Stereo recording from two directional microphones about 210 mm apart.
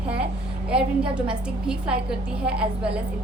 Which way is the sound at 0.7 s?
5° right (ahead or behind).